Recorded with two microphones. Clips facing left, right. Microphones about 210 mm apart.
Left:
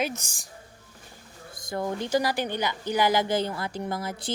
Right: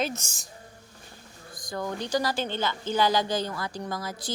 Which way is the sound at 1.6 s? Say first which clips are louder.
Left 3 dB; 25° left (ahead or behind).